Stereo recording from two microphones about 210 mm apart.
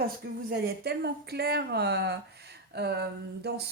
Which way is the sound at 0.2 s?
50° right (ahead or behind).